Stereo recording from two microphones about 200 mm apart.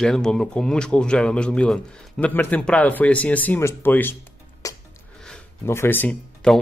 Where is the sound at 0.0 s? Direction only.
5° left (ahead or behind).